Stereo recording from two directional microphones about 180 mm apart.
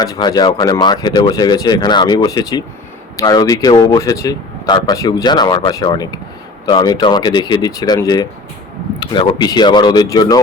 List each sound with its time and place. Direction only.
0.0 s speech: 20° left (ahead or behind)